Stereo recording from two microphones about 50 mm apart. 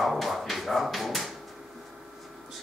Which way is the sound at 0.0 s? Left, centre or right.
Centre.